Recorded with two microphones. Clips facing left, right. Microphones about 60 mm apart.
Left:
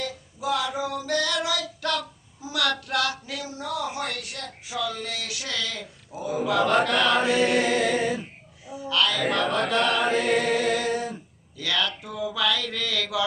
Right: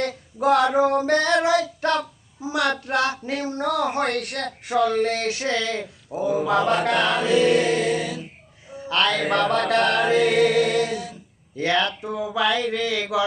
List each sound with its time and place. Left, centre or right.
0.0 s female singing: right
3.5 s speech: right
6.1 s mantra: right
7.2 s chant: left
8.7 s music: right
9.3 s a sound: right
10.8 s a sound: left
11.5 s mantra: right